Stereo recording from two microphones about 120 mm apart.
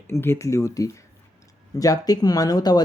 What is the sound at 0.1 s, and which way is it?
Speech, 20° left (ahead or behind).